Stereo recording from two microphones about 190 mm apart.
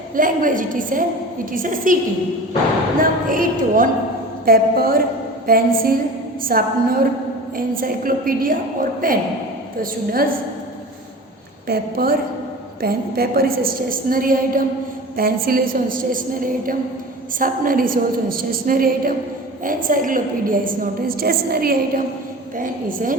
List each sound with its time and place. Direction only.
0.2 s a woman's voice: 45° right (ahead or behind)
3.0 s a woman's voice: 45° right (ahead or behind)
11.7 s a woman's voice: 50° right (ahead or behind)